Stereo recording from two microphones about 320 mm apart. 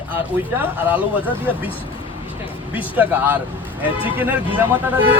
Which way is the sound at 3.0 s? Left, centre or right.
Centre.